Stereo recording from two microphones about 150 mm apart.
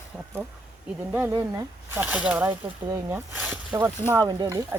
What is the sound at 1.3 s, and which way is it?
Speech, 20° right (ahead or behind).